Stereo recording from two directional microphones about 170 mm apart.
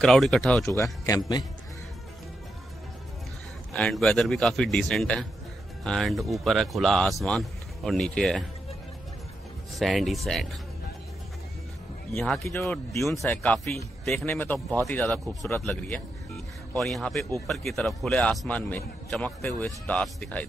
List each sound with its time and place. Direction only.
0.0 s speech: centre (ahead or behind)
1.0 s a man's voice: 20° left (ahead or behind)
3.7 s speech: 5° left (ahead or behind)
9.8 s speech: centre (ahead or behind)
12.1 s speech: centre (ahead or behind)
12.9 s a man's voice: 15° left (ahead or behind)